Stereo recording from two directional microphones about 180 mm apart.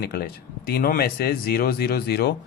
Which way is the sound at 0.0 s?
60° left (ahead or behind).